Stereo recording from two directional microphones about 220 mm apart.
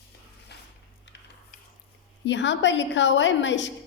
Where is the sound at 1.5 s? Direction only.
40° left (ahead or behind).